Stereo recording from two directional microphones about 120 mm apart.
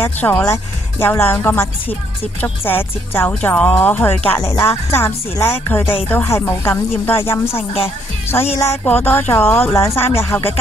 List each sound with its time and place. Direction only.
0.0 s speech: 15° left (ahead or behind)